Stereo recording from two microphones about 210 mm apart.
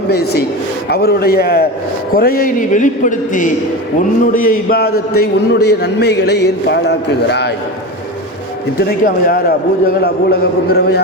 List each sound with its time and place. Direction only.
0.9 s a man's voice: 50° left (ahead or behind)
8.8 s a man's voice: 45° left (ahead or behind)